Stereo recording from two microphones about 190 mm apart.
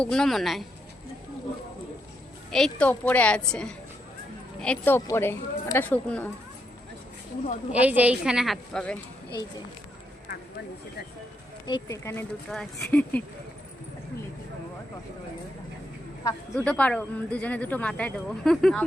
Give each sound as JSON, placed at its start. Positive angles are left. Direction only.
{"t": 0.0, "sound": "a woman's voice", "side_deg": 5}
{"t": 2.5, "sound": "a woman's voice", "side_deg": 5}
{"t": 7.7, "sound": "a woman's voice", "side_deg": -10}
{"t": 11.6, "sound": "speech", "side_deg": 20}
{"t": 12.5, "sound": "speech", "side_deg": 5}
{"t": 16.6, "sound": "speech", "side_deg": 5}